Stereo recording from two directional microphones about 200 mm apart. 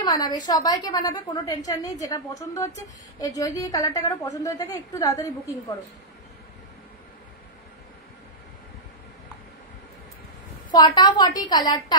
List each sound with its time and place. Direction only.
0.0 s a woman's voice: 20° left (ahead or behind)
10.7 s a woman's voice: 20° left (ahead or behind)